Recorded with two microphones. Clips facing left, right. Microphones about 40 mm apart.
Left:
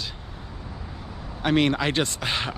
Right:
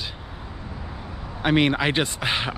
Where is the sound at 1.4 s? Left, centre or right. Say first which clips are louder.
Right 2 dB; centre.